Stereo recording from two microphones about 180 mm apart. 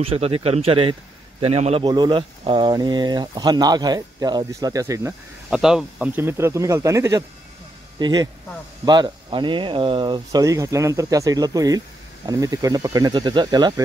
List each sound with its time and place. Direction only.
0.0 s speech: 30° right (ahead or behind)
1.9 s speech: 25° right (ahead or behind)
5.5 s speech: 5° right (ahead or behind); by 13.8 s 20° right (ahead or behind)